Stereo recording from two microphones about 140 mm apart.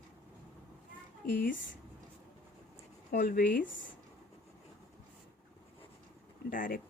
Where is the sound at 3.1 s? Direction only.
90° left.